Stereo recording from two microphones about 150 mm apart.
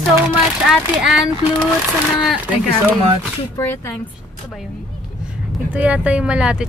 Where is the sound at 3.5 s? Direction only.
15° left (ahead or behind).